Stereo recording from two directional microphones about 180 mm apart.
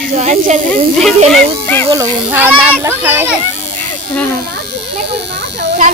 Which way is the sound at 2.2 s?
10° right (ahead or behind).